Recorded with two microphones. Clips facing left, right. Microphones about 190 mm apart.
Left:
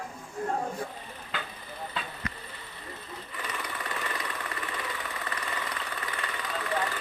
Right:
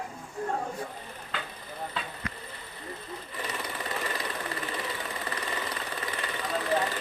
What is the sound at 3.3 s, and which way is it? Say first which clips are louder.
Engine: right 1 dB; 30° right (ahead or behind).